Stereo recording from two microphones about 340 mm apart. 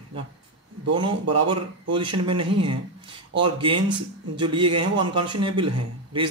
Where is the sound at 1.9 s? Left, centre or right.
Centre.